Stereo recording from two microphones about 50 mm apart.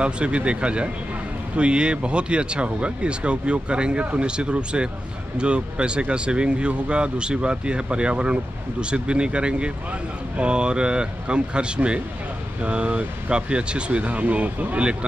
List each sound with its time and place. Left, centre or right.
0.0 s speech: right